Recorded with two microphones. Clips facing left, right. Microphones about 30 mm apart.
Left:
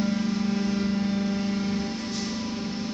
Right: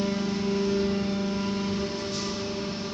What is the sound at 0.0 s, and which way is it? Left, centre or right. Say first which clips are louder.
Music: left 2 dB; right.